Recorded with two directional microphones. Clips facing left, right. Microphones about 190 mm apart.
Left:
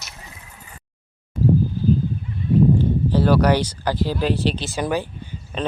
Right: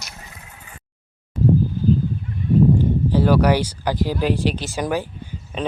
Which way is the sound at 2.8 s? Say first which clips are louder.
Right 1 dB; 10° right (ahead or behind).